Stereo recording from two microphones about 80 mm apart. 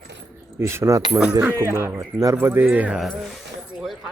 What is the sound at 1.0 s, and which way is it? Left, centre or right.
Speech, centre.